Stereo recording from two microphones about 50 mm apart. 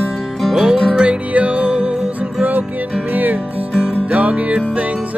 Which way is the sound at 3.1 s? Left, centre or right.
Right.